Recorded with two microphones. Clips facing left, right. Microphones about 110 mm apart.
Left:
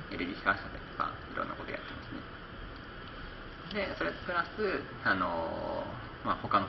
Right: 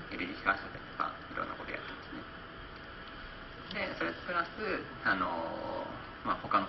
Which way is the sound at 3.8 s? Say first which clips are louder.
Left 2 dB; centre (ahead or behind).